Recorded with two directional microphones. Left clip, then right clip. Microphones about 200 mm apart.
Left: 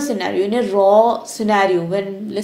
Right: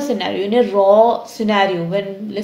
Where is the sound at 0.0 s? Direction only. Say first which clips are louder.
Even; 30° left (ahead or behind).